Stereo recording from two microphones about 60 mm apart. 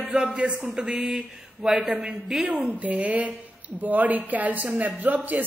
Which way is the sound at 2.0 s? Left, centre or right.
Centre.